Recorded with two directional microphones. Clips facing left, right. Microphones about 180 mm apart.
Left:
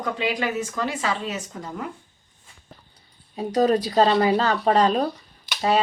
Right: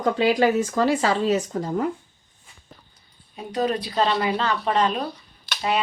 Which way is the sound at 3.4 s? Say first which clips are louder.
Left 5 dB; 40° left (ahead or behind).